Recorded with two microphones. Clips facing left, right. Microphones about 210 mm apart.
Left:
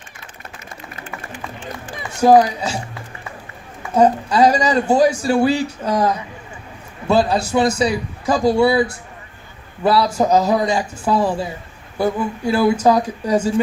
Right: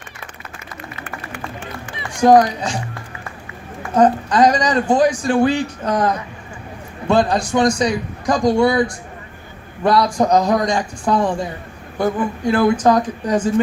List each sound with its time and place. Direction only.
2.0 s a man's voice: 5° left (ahead or behind)
3.9 s a man's voice: 10° left (ahead or behind)